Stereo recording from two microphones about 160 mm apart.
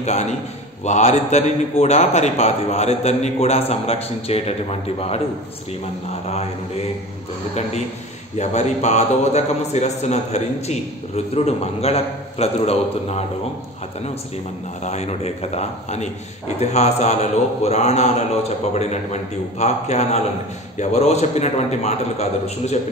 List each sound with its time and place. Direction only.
0.0 s a man's voice: 45° left (ahead or behind)
8.4 s a man's voice: 45° left (ahead or behind)
14.8 s a man's voice: 45° left (ahead or behind)